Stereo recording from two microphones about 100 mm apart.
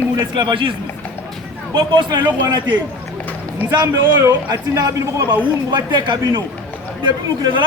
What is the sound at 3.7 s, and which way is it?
A man's voice, 40° right (ahead or behind).